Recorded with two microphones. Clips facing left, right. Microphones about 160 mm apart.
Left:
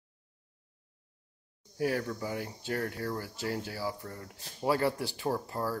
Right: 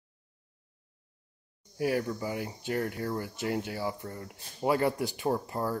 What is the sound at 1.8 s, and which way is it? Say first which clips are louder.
Speech: right 2 dB; 15° right (ahead or behind).